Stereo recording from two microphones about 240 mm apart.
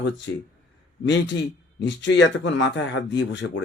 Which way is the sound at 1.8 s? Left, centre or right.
Left.